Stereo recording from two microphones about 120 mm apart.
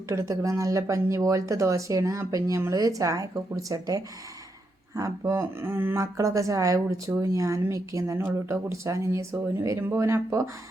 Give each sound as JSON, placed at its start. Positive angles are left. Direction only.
{"t": 0.1, "sound": "speech", "side_deg": -25}